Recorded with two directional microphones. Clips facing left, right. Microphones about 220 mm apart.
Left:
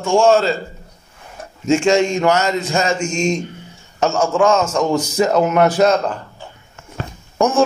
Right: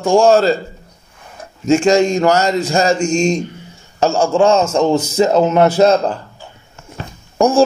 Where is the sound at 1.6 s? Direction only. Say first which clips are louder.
Right 3 dB; 35° right (ahead or behind).